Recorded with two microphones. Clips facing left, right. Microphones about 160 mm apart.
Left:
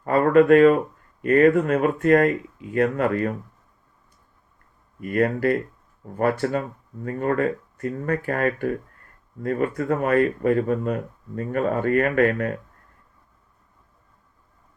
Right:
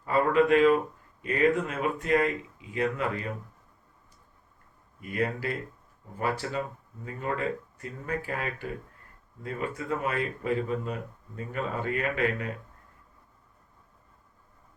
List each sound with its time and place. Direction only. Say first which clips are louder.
0.0 s speech: left 7 dB; 50° left (ahead or behind)
4.9 s speech: left 8 dB; 55° left (ahead or behind)